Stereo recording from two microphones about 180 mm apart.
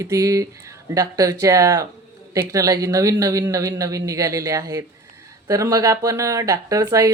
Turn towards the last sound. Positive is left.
turn(degrees=-20)  # may be behind; listen again after turning